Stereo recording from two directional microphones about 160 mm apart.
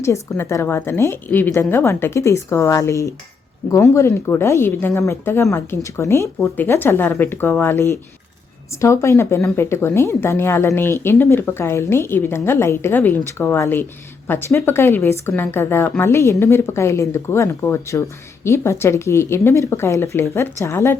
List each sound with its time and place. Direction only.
0.0 s speech: 15° left (ahead or behind)